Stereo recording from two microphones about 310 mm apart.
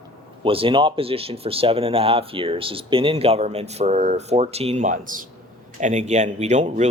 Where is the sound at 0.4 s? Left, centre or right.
Centre.